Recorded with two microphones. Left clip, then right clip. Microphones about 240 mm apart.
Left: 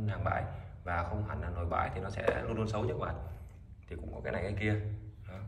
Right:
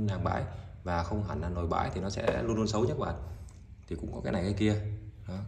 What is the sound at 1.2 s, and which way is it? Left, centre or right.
Speech, centre.